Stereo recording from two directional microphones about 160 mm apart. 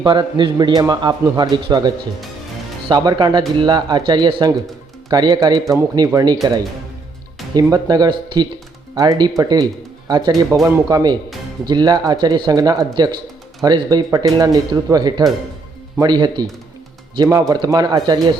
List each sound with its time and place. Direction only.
0.0 s a man's voice: 30° right (ahead or behind)
2.9 s a man's voice: 25° right (ahead or behind)
7.5 s a man's voice: 25° right (ahead or behind)